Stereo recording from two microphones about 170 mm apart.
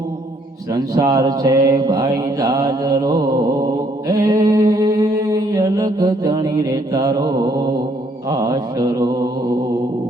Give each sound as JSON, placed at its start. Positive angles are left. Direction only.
{"t": 0.7, "sound": "mantra", "side_deg": -25}